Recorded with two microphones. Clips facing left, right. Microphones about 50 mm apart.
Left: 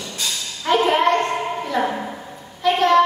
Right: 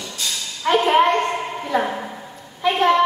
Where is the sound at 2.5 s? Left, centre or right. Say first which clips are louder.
Left 1 dB; centre.